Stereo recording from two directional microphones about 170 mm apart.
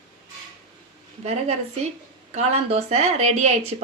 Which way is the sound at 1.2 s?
40° right (ahead or behind).